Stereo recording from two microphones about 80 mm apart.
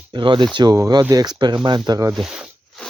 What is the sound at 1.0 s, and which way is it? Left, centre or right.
Speech, right.